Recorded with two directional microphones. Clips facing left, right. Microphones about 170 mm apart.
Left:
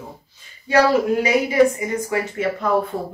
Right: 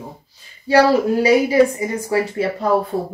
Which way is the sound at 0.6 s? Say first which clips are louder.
Right 2 dB; 35° right (ahead or behind).